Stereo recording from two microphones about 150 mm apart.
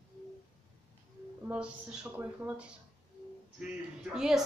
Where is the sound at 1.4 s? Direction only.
10° right (ahead or behind).